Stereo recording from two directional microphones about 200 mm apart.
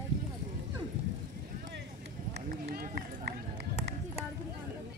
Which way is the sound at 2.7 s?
55° right (ahead or behind).